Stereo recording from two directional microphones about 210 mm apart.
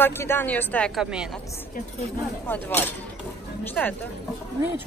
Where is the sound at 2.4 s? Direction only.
10° left (ahead or behind).